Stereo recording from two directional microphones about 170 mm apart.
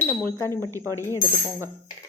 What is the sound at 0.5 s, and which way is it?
Speech, 20° right (ahead or behind).